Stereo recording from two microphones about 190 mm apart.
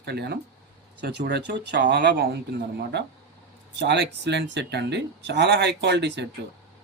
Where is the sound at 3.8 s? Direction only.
65° right (ahead or behind).